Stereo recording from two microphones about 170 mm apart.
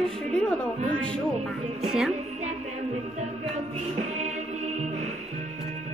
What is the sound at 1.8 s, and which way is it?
Music, 5° right (ahead or behind).